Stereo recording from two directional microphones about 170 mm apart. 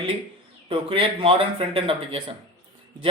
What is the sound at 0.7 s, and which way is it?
Speech, 30° right (ahead or behind).